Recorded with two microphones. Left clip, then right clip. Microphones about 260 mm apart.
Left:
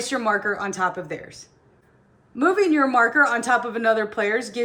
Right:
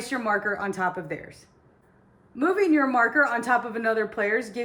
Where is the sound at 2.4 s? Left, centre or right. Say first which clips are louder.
Left 3 dB; centre.